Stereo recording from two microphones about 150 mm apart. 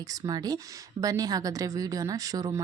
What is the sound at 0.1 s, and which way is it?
Speech, 25° right (ahead or behind).